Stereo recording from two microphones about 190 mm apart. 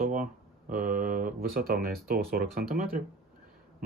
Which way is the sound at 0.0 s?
45° right (ahead or behind).